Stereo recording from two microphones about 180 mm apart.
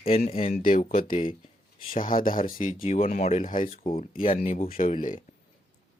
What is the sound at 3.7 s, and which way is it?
Speech, 35° left (ahead or behind).